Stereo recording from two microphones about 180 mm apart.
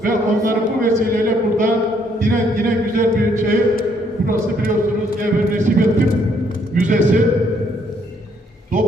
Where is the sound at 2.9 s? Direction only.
50° right (ahead or behind).